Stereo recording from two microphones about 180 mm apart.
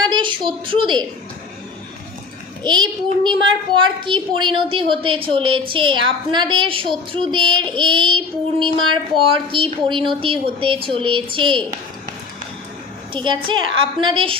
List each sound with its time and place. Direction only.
0.0 s a sound: 25° right (ahead or behind)
2.6 s a child's voice: 25° right (ahead or behind)
13.1 s a child's voice: 25° right (ahead or behind)